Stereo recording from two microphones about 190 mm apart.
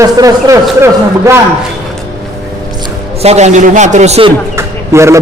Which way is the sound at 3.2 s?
35° right (ahead or behind).